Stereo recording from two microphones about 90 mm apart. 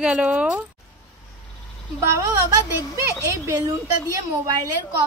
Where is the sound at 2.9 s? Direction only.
30° right (ahead or behind).